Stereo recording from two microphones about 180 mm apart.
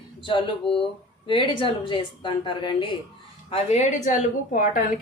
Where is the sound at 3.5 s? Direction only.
40° left (ahead or behind).